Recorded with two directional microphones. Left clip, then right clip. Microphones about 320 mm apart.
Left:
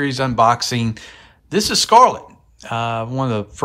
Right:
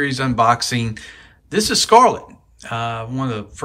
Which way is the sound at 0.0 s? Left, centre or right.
Centre.